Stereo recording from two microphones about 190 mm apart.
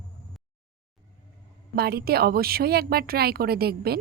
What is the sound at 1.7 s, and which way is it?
Speech, 55° right (ahead or behind).